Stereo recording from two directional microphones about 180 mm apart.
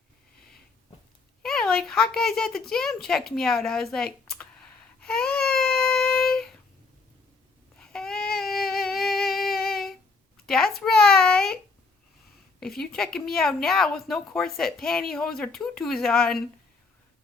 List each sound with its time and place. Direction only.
1.4 s speech: centre (ahead or behind)
4.9 s baby cry: 5° left (ahead or behind)
7.8 s a sound: 5° left (ahead or behind)
12.5 s a woman's voice: 5° left (ahead or behind)